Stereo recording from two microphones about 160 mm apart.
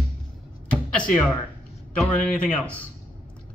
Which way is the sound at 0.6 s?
10° left (ahead or behind).